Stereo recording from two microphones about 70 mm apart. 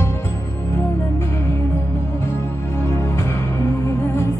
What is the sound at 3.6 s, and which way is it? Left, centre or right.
Music, left.